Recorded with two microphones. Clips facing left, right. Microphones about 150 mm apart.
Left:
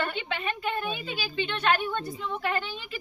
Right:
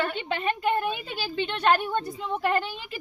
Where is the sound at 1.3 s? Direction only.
35° right (ahead or behind).